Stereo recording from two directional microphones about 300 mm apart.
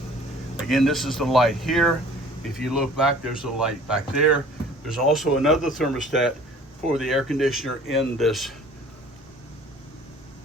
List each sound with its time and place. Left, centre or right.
0.5 s speech: centre